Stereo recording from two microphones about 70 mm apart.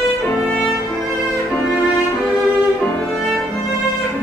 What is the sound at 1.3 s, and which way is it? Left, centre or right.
Music, centre.